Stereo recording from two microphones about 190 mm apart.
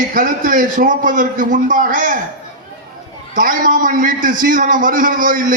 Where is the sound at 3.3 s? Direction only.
45° right (ahead or behind).